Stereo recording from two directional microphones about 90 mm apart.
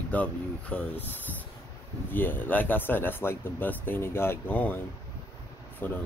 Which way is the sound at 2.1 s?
20° left (ahead or behind).